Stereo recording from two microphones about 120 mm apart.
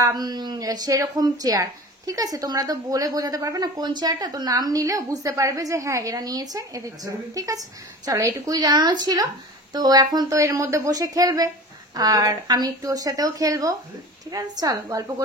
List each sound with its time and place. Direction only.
0.0 s a woman's voice: 35° right (ahead or behind)